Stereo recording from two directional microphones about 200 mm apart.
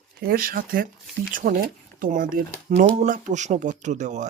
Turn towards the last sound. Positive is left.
turn(degrees=-35)  # may be behind; listen again after turning